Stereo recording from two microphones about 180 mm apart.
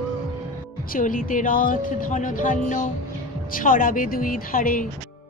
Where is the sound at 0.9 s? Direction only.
50° left (ahead or behind).